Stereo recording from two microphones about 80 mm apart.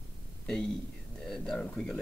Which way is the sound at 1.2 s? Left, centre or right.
Centre.